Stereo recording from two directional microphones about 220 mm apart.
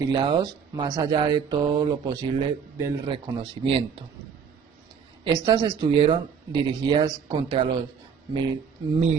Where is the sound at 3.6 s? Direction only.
25° right (ahead or behind).